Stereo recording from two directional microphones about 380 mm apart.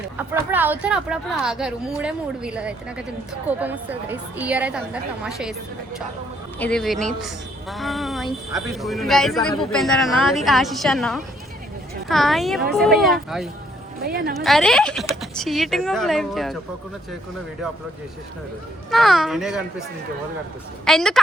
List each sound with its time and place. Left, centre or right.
0.2 s a woman's voice: centre
6.6 s a woman's voice: centre
14.0 s speech: right
14.3 s a woman's voice: centre
18.9 s a woman's voice: centre
20.8 s a woman's voice: centre